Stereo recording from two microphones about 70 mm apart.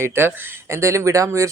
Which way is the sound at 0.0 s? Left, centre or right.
Right.